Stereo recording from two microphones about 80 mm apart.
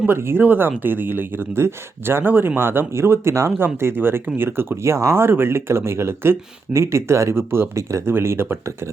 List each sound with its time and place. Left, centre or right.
0.1 s speech: right